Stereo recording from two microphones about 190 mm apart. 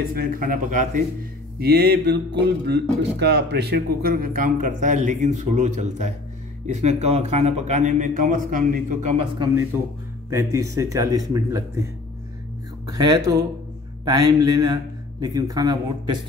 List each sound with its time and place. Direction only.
0.1 s speech: 50° right (ahead or behind)
1.6 s a man's voice: 55° right (ahead or behind)
10.3 s speech: 15° right (ahead or behind)
12.8 s a man's voice: 20° right (ahead or behind)